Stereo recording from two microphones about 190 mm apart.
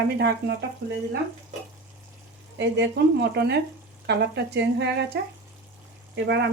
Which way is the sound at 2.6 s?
65° right (ahead or behind).